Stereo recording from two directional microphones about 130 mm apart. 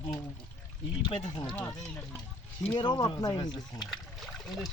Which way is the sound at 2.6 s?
40° left (ahead or behind).